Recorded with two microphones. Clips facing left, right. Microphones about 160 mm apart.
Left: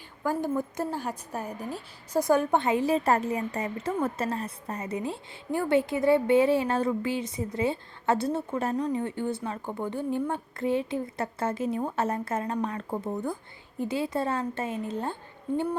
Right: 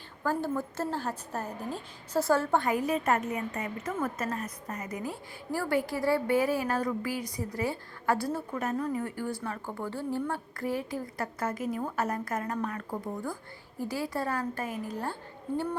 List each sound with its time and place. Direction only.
0.2 s a woman's voice: 15° left (ahead or behind)